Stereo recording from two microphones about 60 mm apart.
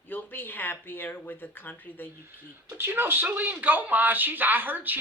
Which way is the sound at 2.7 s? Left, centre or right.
Right.